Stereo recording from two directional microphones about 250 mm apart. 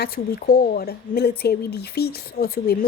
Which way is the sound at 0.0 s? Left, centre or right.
Left.